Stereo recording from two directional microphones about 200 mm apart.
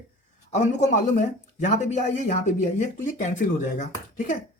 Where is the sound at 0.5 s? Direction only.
35° left (ahead or behind).